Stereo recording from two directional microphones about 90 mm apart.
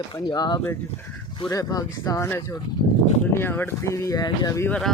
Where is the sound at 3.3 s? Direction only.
25° left (ahead or behind); by 4.6 s 40° left (ahead or behind).